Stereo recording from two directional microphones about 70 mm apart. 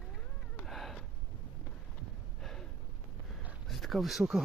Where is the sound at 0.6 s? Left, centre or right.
Centre.